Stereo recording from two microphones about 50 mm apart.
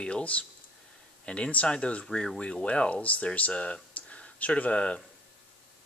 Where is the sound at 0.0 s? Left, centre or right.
Left.